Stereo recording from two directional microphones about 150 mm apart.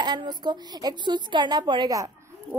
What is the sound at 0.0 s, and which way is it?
A woman's voice, 30° right (ahead or behind).